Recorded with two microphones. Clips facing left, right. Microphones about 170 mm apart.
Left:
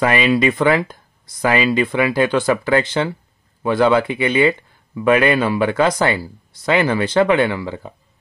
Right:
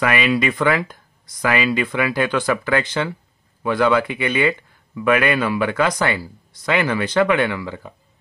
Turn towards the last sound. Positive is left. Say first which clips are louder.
# left 3 dB
turn(degrees=30)  # may be behind; listen again after turning